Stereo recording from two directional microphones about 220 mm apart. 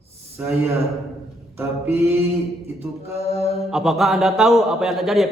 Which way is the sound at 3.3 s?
30° left (ahead or behind).